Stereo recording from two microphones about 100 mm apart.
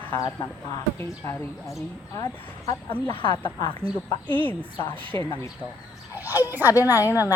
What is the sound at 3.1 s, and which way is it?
Speech, 55° left (ahead or behind).